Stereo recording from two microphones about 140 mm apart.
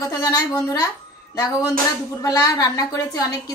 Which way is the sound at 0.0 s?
25° left (ahead or behind).